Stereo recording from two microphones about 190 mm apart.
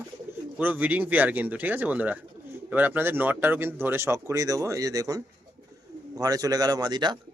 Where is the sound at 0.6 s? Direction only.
10° right (ahead or behind).